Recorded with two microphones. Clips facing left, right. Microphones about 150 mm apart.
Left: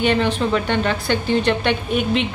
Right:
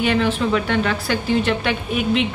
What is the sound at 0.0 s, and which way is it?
Speech, centre (ahead or behind).